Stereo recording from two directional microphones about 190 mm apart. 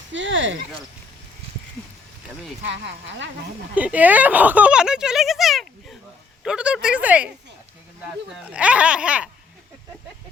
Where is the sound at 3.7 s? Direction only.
5° right (ahead or behind).